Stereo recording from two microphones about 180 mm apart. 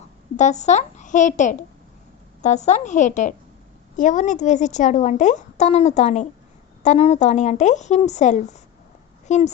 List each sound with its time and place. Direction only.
0.3 s a woman's voice: 40° left (ahead or behind)